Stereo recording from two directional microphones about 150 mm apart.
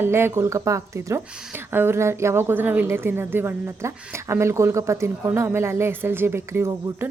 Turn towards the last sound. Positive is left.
turn(degrees=-15)  # may be behind; listen again after turning